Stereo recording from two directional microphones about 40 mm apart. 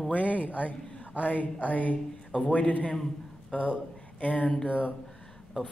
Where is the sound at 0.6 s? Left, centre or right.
Left.